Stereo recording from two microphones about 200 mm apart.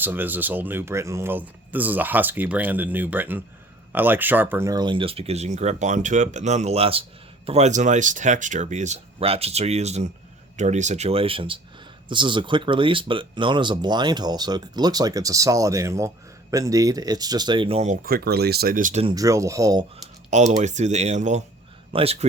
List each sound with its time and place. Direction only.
0.0 s speech: 10° right (ahead or behind); by 17.9 s 30° right (ahead or behind)
18.0 s speech: 50° right (ahead or behind)
19.0 s speech: 15° right (ahead or behind)
20.6 s speech: 35° right (ahead or behind)